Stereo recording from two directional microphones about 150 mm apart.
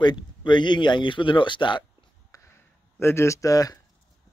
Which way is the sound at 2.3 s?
20° left (ahead or behind).